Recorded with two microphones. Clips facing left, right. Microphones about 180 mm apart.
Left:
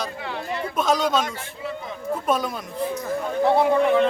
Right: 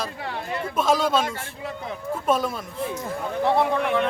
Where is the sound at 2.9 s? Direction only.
25° right (ahead or behind).